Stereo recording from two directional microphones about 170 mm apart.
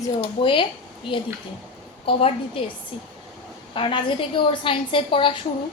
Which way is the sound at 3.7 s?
30° left (ahead or behind).